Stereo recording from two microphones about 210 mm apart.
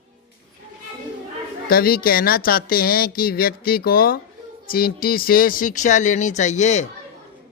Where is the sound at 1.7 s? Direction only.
45° left (ahead or behind).